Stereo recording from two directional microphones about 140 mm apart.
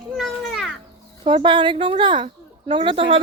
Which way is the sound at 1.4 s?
35° right (ahead or behind).